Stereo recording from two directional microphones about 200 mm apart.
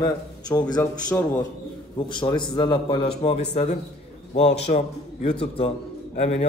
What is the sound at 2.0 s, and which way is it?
A man's voice, 25° left (ahead or behind).